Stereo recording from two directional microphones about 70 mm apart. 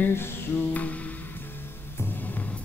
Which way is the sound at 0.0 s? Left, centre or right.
Left.